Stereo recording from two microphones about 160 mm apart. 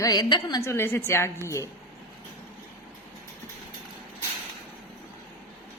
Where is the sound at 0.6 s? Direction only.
15° left (ahead or behind).